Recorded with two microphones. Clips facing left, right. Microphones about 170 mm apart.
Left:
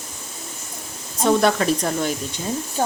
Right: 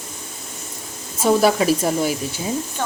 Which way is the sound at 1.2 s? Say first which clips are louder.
Right 2 dB; 5° right (ahead or behind).